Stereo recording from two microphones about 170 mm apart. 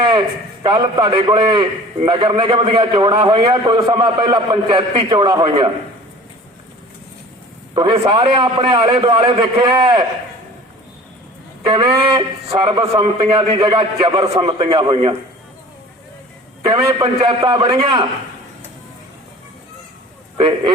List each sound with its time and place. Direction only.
0.1 s a man's voice: 25° right (ahead or behind)
7.7 s a man's voice: 30° right (ahead or behind)
11.6 s a man's voice: 25° right (ahead or behind)
16.7 s a man's voice: 30° right (ahead or behind)